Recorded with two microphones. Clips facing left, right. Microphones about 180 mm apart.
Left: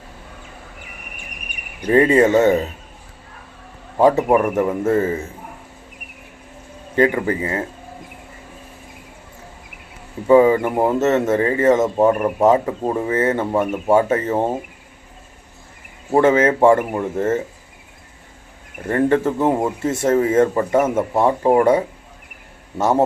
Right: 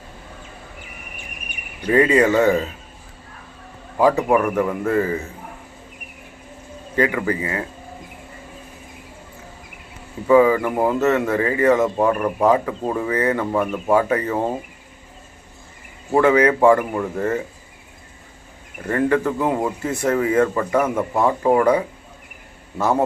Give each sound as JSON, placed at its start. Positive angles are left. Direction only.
{"t": 1.9, "sound": "speech", "side_deg": 30}
{"t": 3.9, "sound": "speech", "side_deg": 25}
{"t": 6.9, "sound": "speech", "side_deg": 30}
{"t": 10.2, "sound": "speech", "side_deg": 30}
{"t": 16.5, "sound": "speech", "side_deg": 25}
{"t": 18.9, "sound": "speech", "side_deg": 30}